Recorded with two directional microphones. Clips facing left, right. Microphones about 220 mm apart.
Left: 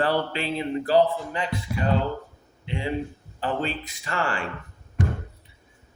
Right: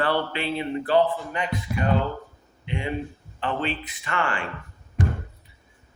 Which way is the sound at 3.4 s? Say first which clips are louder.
Even; 45° left (ahead or behind).